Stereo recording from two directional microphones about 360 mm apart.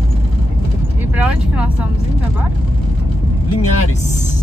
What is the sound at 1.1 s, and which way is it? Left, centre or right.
Vehicle, centre.